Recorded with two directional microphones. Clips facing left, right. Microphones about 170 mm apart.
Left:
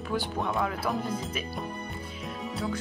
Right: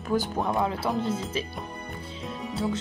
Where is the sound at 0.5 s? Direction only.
25° right (ahead or behind).